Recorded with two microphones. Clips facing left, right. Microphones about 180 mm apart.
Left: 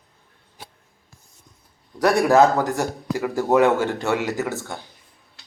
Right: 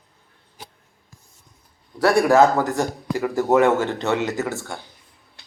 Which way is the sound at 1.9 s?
20° left (ahead or behind).